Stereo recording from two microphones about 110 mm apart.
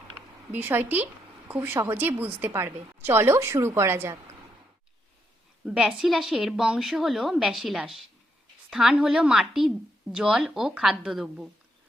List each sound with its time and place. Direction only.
0.5 s a woman's voice: 20° right (ahead or behind)
5.6 s a woman's voice: 5° right (ahead or behind)